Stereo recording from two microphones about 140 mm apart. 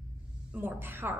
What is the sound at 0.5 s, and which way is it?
Speech, 15° right (ahead or behind).